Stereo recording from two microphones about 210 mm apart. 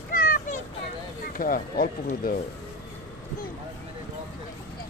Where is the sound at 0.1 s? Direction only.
40° left (ahead or behind).